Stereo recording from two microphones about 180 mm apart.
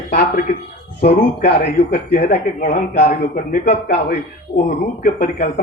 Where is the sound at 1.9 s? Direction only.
50° left (ahead or behind).